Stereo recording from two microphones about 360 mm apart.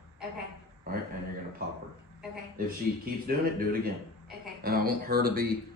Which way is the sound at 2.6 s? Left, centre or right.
Right.